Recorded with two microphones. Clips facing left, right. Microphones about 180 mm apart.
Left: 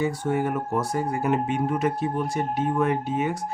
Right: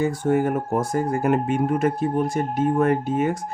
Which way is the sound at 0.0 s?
45° right (ahead or behind).